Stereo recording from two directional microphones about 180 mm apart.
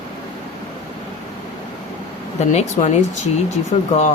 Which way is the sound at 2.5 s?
40° left (ahead or behind).